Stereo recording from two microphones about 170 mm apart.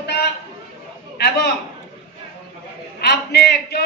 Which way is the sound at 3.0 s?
75° left (ahead or behind).